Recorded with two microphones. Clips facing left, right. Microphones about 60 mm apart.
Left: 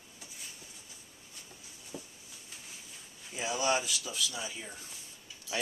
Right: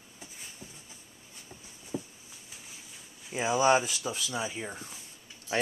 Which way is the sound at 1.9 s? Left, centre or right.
Centre.